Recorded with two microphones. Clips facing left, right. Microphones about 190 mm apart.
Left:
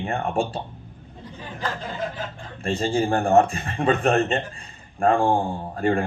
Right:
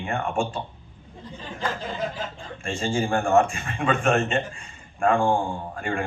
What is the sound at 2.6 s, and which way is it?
A man's voice, 35° left (ahead or behind).